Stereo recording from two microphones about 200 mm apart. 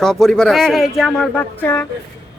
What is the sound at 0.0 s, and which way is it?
Speech, centre (ahead or behind).